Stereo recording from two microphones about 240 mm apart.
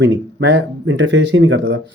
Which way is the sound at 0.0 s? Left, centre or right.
Right.